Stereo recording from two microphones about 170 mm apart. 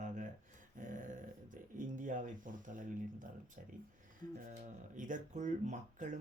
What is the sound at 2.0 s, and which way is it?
Speech, 50° right (ahead or behind).